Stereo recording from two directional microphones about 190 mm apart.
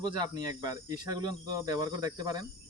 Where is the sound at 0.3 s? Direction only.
20° right (ahead or behind).